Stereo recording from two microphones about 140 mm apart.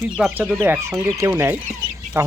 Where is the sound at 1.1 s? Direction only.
15° right (ahead or behind).